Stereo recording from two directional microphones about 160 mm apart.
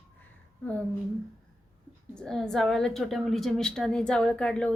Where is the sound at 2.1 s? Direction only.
5° left (ahead or behind).